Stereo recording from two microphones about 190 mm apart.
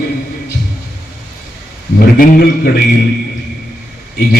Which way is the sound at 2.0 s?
50° left (ahead or behind).